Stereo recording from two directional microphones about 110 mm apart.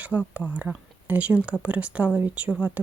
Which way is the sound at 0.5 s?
15° right (ahead or behind).